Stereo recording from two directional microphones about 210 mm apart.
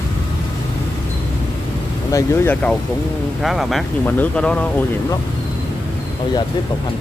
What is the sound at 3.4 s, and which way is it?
Speech, centre (ahead or behind).